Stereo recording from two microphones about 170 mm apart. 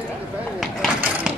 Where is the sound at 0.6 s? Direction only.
5° right (ahead or behind).